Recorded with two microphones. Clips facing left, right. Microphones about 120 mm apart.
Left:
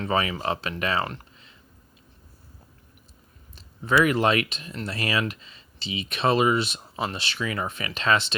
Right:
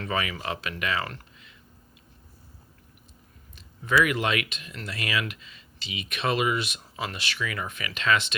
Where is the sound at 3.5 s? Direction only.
35° left (ahead or behind).